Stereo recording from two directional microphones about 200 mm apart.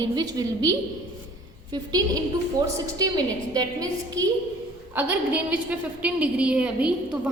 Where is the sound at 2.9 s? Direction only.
20° right (ahead or behind).